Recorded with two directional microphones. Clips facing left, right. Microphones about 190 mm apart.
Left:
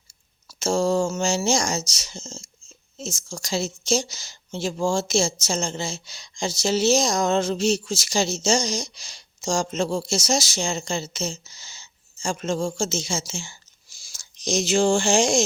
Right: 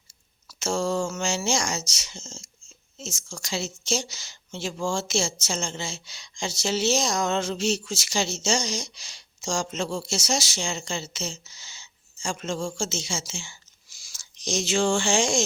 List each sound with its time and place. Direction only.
0.4 s speech: 35° left (ahead or behind)